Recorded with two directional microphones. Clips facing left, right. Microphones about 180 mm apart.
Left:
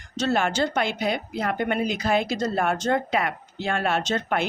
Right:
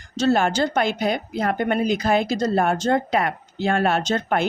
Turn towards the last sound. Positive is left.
turn(degrees=-40)  # may be behind; listen again after turning